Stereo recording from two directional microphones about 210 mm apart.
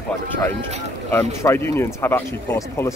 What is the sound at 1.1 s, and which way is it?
Speech, 10° left (ahead or behind).